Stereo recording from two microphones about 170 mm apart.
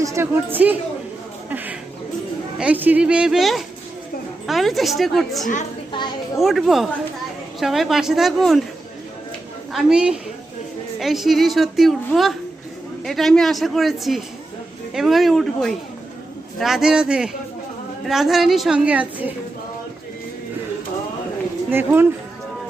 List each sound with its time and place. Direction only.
0.0 s a woman's voice: 15° right (ahead or behind); by 5.5 s centre (ahead or behind)
5.9 s children playing: 25° left (ahead or behind)
6.4 s a woman's voice: centre (ahead or behind)
9.7 s a woman's voice: 5° right (ahead or behind)
21.7 s a woman's voice: 15° right (ahead or behind)